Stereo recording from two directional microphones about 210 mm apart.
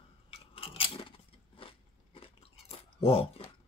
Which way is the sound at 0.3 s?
25° left (ahead or behind).